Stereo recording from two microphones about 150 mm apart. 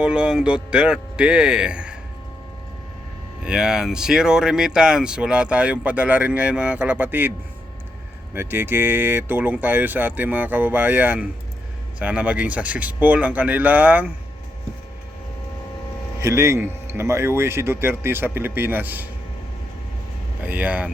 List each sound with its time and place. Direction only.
0.0 s speech: 5° right (ahead or behind)
3.4 s speech: 5° right (ahead or behind)
16.1 s speech: 20° right (ahead or behind)
20.4 s speech: 10° right (ahead or behind)